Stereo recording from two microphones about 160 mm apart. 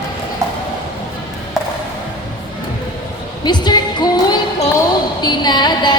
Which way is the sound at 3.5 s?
25° left (ahead or behind).